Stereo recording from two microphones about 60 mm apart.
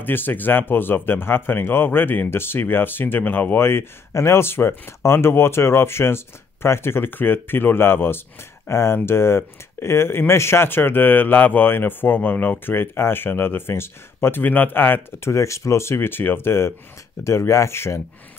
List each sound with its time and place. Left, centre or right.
0.0 s speech: left
15.3 s speech: left
17.2 s speech: left